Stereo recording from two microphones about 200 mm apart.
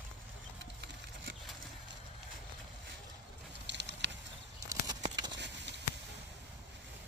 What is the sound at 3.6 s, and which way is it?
Patter, 60° right (ahead or behind).